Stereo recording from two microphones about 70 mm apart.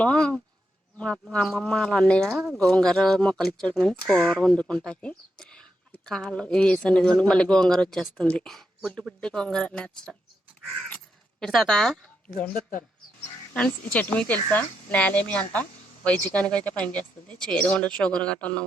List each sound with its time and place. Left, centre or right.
0.0 s a sound: centre
0.9 s speech: centre
2.3 s speech: centre
2.6 s speech: centre
11.3 s a woman's voice: centre
13.9 s speech: left